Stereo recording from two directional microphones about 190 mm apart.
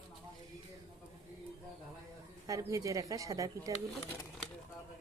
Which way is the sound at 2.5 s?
15° right (ahead or behind).